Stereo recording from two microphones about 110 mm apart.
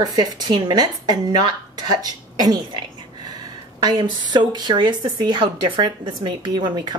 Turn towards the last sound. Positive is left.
turn(degrees=-45)  # may be behind; listen again after turning